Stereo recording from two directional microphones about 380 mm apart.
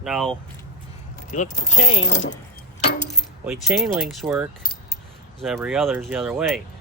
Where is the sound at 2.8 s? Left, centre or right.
Centre.